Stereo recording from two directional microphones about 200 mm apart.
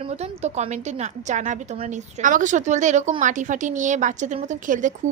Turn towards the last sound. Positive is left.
turn(degrees=-40)  # may be behind; listen again after turning